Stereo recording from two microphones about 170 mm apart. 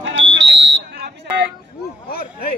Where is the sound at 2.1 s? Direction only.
60° left (ahead or behind).